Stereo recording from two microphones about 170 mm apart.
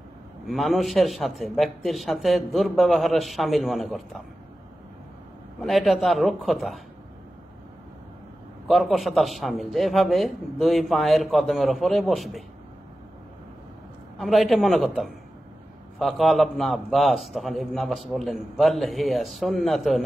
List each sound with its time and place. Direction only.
0.5 s a man's voice: centre (ahead or behind)
5.6 s a man's voice: centre (ahead or behind)
8.6 s a man's voice: centre (ahead or behind)
14.1 s a man's voice: centre (ahead or behind)